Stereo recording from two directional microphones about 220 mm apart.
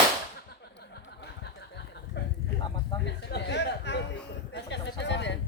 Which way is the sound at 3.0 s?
50° left (ahead or behind).